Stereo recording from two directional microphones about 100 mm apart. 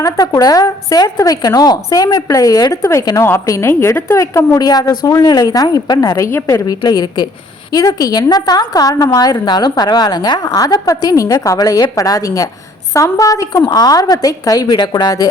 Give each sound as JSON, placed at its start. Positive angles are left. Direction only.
{"t": 0.0, "sound": "a woman's voice", "side_deg": 35}
{"t": 3.2, "sound": "a woman's voice", "side_deg": 30}
{"t": 6.8, "sound": "a woman's voice", "side_deg": 45}